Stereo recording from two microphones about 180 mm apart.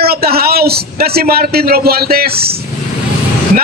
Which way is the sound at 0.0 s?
60° right (ahead or behind).